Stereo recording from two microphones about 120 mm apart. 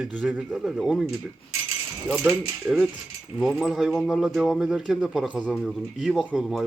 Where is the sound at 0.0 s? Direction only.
5° right (ahead or behind).